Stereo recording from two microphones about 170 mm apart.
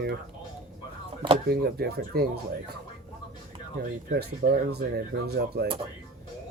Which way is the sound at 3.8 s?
65° right (ahead or behind).